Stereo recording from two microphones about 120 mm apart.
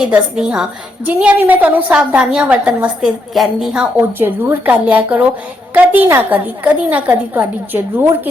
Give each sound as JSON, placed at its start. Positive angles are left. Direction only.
{"t": 0.0, "sound": "a woman's voice", "side_deg": -5}